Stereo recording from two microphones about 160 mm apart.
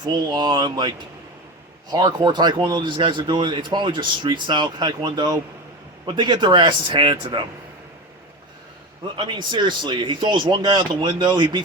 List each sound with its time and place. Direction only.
0.0 s speech: 25° right (ahead or behind)
9.1 s speech: 30° right (ahead or behind)